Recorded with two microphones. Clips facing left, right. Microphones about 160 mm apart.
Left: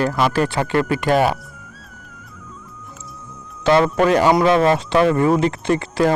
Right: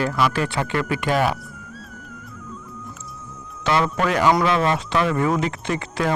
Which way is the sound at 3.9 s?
30° left (ahead or behind).